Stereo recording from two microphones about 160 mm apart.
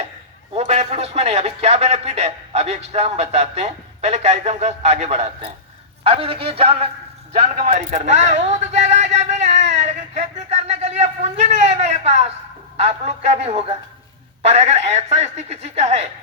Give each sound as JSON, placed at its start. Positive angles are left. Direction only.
{"t": 0.5, "sound": "a man's voice", "side_deg": -45}
{"t": 7.5, "sound": "a sound", "side_deg": -50}
{"t": 12.7, "sound": "speech", "side_deg": -40}